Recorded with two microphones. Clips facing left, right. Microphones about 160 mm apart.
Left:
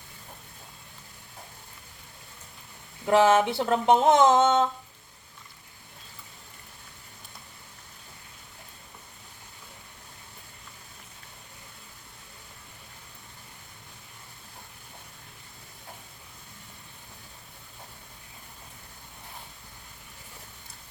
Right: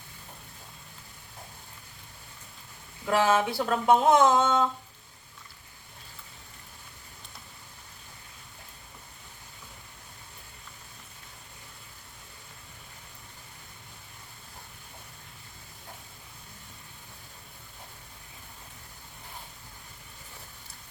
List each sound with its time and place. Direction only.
3.1 s speech: 25° left (ahead or behind)